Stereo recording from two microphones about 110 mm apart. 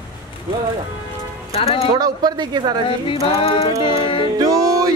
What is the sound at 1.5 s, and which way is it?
Speech, 60° left (ahead or behind).